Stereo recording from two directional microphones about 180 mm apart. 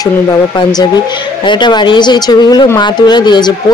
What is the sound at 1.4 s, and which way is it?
Speech, 25° left (ahead or behind).